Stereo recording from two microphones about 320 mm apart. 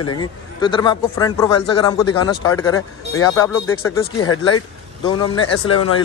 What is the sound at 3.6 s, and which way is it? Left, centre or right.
Speech, left.